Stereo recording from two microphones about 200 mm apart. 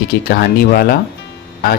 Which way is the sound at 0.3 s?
50° left (ahead or behind).